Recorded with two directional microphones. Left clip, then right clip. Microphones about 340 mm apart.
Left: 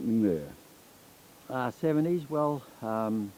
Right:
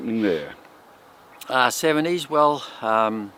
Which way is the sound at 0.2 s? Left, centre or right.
Centre.